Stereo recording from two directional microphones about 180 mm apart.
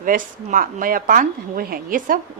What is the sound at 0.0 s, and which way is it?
Speech, 50° right (ahead or behind).